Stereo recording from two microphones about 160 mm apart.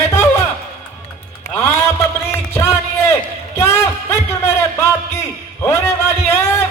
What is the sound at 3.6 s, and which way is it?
Music, 15° left (ahead or behind).